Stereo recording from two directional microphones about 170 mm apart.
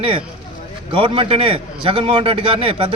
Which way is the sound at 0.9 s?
30° right (ahead or behind).